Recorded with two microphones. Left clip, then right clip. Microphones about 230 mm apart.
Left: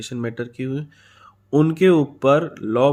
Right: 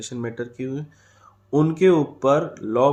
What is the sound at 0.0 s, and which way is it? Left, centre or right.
Speech, left.